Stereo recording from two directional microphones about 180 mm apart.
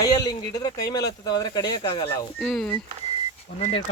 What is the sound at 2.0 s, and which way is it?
Speech, 5° left (ahead or behind).